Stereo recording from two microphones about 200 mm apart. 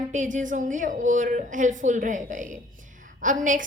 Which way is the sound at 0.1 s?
40° right (ahead or behind).